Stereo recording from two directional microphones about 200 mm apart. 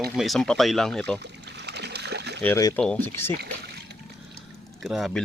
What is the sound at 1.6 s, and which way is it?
Splash, 55° right (ahead or behind).